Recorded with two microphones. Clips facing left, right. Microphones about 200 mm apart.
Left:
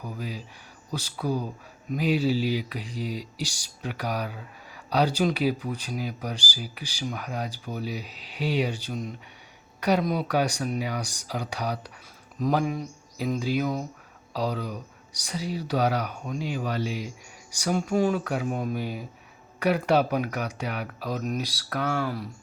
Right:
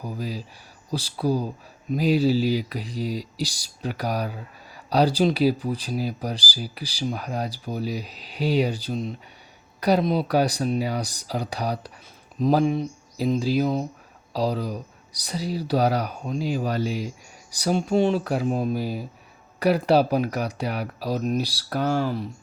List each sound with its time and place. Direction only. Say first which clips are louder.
0.0 s speech: right 4 dB; 35° right (ahead or behind)